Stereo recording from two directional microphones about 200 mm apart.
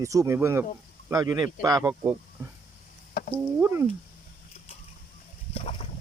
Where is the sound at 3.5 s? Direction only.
10° right (ahead or behind).